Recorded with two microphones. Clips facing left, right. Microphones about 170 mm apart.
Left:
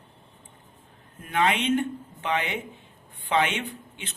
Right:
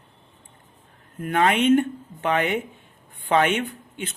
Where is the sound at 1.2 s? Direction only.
50° right (ahead or behind).